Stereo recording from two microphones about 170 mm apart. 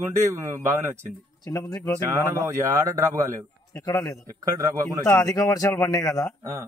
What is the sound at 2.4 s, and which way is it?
Speech, 20° right (ahead or behind).